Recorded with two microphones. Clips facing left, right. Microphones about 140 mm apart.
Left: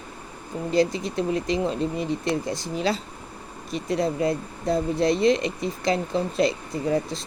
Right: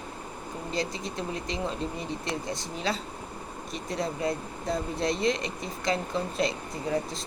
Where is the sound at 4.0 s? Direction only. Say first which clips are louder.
Left 5 dB; 35° left (ahead or behind).